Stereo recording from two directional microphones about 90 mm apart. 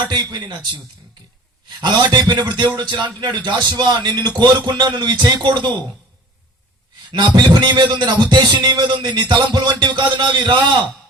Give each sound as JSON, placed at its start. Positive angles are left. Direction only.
{"t": 0.0, "sound": "speech", "side_deg": -50}
{"t": 1.8, "sound": "speech", "side_deg": -55}
{"t": 7.1, "sound": "a man's voice", "side_deg": -55}